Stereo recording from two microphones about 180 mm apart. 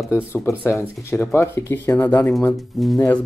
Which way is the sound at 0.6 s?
15° left (ahead or behind).